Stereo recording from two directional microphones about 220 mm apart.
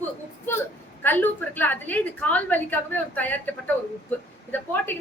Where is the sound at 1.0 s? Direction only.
10° left (ahead or behind).